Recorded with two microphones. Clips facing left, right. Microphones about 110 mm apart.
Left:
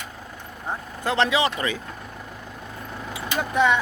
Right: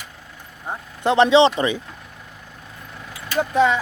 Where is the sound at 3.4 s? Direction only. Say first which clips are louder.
Right 3 dB; 30° right (ahead or behind).